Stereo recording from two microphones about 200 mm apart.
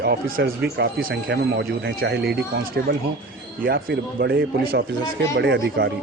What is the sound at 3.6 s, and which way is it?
Speech, 50° right (ahead or behind).